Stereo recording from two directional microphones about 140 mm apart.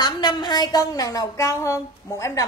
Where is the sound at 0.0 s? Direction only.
30° left (ahead or behind).